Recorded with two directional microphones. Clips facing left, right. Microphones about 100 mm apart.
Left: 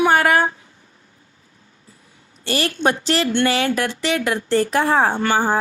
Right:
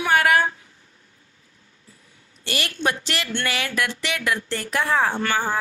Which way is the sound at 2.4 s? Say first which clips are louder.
Left 6 dB; 35° left (ahead or behind).